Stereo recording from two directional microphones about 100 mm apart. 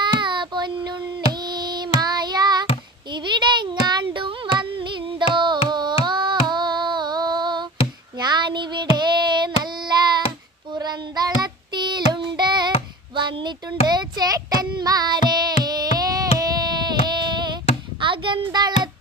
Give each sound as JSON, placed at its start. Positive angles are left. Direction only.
{"t": 0.0, "sound": "child singing", "side_deg": -50}
{"t": 3.1, "sound": "a sound", "side_deg": -50}
{"t": 4.5, "sound": "music", "side_deg": -55}
{"t": 5.3, "sound": "carnatic music", "side_deg": -50}
{"t": 6.1, "sound": "female singing", "side_deg": -50}
{"t": 8.2, "sound": "child singing", "side_deg": -45}
{"t": 13.1, "sound": "a sound", "side_deg": -50}
{"t": 13.9, "sound": "carnatic music", "side_deg": -45}
{"t": 15.6, "sound": "a sound", "side_deg": -40}
{"t": 16.4, "sound": "child singing", "side_deg": -40}